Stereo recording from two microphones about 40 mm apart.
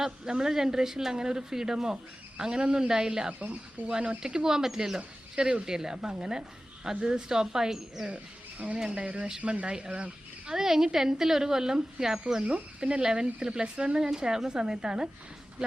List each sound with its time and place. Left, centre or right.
0.0 s speech: centre
3.4 s speech: right
4.2 s speech: centre
4.9 s speech: right
8.0 s speech: right
10.5 s speech: centre